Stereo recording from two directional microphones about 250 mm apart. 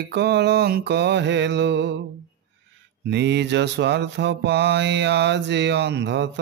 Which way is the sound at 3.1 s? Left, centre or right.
Right.